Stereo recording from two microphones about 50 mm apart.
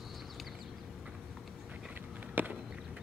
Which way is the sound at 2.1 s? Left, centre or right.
Right.